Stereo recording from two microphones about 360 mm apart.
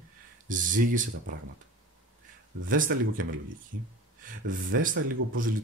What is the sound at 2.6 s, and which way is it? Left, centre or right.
Speech, right.